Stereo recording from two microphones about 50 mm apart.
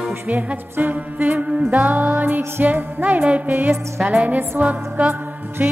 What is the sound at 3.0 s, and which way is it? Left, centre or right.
Music, right.